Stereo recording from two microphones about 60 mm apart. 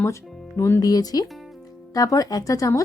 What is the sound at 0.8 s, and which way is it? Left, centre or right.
Speech, left.